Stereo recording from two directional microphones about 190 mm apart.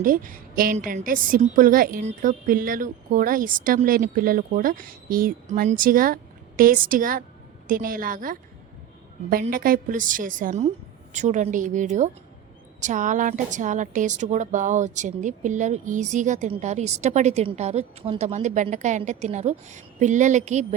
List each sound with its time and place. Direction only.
0.0 s a woman's voice: 45° right (ahead or behind)